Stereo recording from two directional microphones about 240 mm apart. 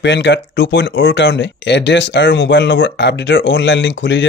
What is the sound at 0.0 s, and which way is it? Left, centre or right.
Speech, left.